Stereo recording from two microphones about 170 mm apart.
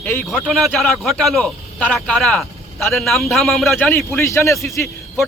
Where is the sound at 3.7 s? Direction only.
10° left (ahead or behind).